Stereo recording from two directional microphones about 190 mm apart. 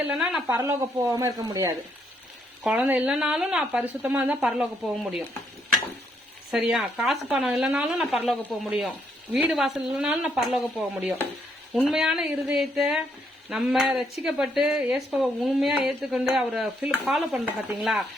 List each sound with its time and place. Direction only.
0.1 s a woman's voice: 5° right (ahead or behind); by 1.7 s 20° right (ahead or behind)
2.6 s a woman's voice: 10° right (ahead or behind)
6.5 s speech: centre (ahead or behind)